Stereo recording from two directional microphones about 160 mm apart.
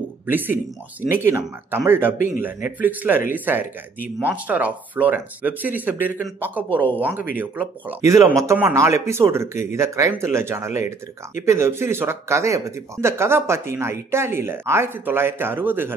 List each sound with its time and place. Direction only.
1.0 s speech: 15° right (ahead or behind)